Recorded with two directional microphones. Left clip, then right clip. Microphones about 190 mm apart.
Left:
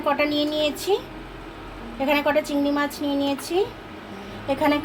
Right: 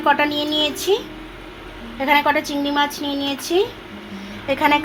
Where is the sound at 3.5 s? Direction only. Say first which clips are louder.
Right 6 dB; 35° right (ahead or behind).